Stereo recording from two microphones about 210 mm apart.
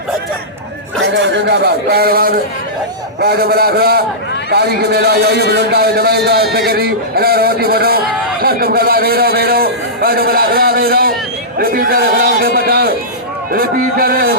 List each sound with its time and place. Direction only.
1.1 s a man's voice: 55° right (ahead or behind)